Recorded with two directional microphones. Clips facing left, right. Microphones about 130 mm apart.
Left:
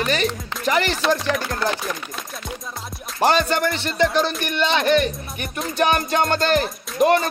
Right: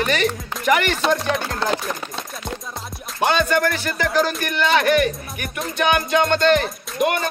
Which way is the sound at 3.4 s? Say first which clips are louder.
Right 2 dB; 25° left (ahead or behind).